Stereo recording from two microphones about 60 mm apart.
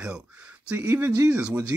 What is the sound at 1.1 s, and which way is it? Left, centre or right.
Speech, right.